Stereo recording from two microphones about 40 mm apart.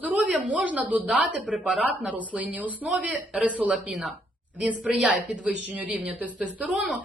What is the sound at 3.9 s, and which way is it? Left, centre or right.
Speech, centre.